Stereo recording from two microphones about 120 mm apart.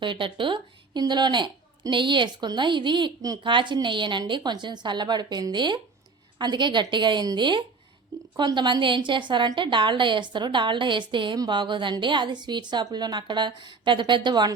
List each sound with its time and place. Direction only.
0.0 s a woman's voice: 45° right (ahead or behind)